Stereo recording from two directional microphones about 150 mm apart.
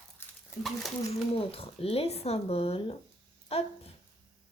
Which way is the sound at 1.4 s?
40° left (ahead or behind).